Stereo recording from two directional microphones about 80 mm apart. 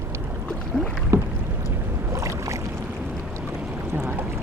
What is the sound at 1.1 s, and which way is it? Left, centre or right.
Rowboat, right.